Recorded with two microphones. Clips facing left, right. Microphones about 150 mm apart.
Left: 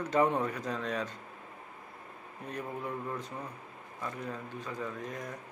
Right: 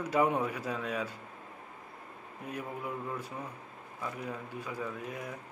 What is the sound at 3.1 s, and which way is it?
A man's voice, 10° right (ahead or behind).